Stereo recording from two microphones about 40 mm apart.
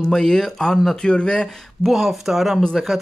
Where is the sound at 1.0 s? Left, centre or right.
Centre.